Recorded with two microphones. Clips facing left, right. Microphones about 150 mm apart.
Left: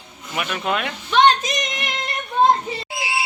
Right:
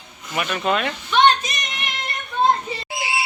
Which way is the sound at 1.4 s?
90° left.